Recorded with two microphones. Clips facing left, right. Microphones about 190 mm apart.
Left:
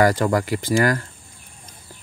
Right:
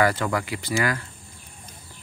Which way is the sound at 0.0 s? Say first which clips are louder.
Left 5 dB; 45° left (ahead or behind).